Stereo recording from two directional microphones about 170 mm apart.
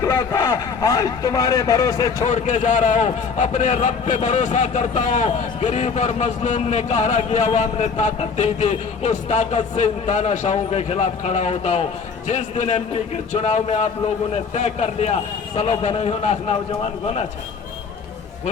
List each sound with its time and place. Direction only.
0.0 s speech: 20° left (ahead or behind)
2.3 s a man's voice: 45° left (ahead or behind)